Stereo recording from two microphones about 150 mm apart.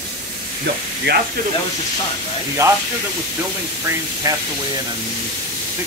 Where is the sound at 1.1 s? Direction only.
90° right.